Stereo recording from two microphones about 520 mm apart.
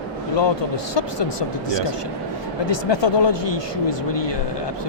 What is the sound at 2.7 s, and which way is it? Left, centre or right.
Speech, left.